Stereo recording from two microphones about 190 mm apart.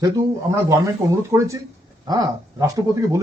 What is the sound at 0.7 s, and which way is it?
A man's voice, 15° right (ahead or behind).